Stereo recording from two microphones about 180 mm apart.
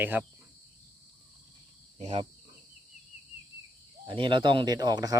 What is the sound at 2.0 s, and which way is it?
Speech, 40° right (ahead or behind).